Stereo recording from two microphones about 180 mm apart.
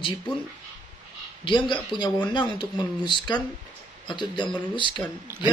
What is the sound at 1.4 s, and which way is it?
Speech, 25° left (ahead or behind).